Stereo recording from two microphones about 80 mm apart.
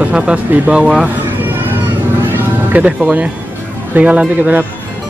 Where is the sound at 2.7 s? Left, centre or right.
Centre.